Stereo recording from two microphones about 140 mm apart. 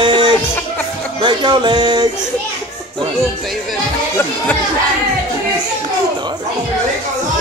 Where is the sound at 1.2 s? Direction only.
35° right (ahead or behind).